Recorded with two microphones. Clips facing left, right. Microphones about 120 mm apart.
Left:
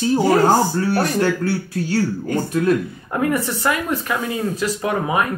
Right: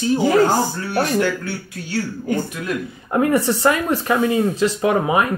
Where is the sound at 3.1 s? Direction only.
25° right (ahead or behind).